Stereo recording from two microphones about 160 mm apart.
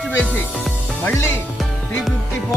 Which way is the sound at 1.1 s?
15° left (ahead or behind).